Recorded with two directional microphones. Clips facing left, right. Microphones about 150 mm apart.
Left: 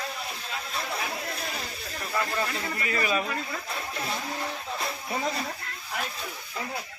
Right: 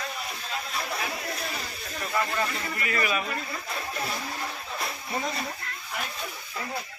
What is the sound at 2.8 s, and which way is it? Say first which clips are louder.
Speech: left 1 dB; 30° left (ahead or behind).